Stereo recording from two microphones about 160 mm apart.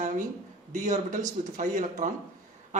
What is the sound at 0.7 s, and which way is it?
Speech, 50° right (ahead or behind).